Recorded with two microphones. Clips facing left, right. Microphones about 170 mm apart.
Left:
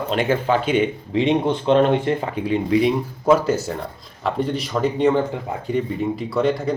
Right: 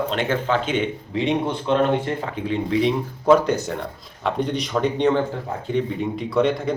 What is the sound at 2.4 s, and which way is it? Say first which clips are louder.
A man's voice: left 2 dB; 10° left (ahead or behind).